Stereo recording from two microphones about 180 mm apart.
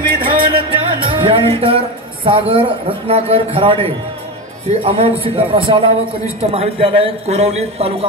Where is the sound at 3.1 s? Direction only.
35° right (ahead or behind).